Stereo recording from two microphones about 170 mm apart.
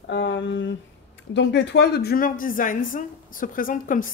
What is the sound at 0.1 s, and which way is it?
A woman's voice, 90° left.